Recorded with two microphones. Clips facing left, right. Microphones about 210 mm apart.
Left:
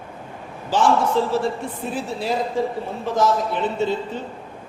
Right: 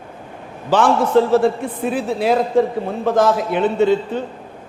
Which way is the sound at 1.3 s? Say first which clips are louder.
Right 7 dB; 60° right (ahead or behind).